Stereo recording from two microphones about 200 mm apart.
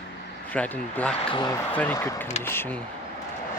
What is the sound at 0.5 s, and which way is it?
Speech, 5° left (ahead or behind).